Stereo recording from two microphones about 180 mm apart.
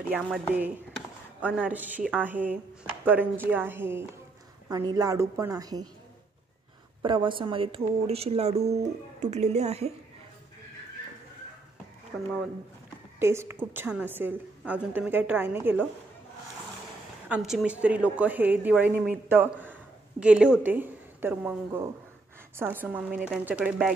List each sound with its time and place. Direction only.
0.1 s a woman's voice: 10° right (ahead or behind)
7.0 s speech: 30° right (ahead or behind)
13.2 s speech: 15° right (ahead or behind)
17.3 s speech: centre (ahead or behind)
19.2 s a sound: 10° right (ahead or behind)
20.6 s a woman's voice: 10° right (ahead or behind)